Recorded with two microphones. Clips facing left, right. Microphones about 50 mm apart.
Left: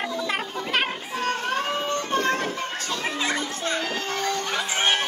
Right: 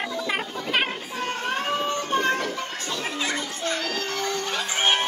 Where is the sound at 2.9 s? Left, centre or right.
Left.